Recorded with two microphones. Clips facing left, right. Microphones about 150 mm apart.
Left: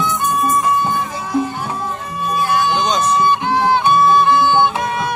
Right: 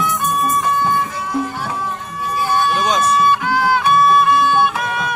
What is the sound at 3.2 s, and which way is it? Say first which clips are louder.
Music: even; 25° left (ahead or behind).